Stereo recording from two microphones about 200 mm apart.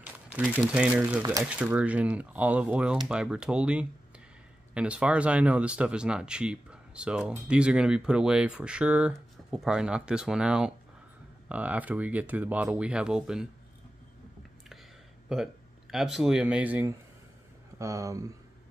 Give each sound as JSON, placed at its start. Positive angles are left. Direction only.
{"t": 0.0, "sound": "speech", "side_deg": -5}
{"t": 15.2, "sound": "speech", "side_deg": -5}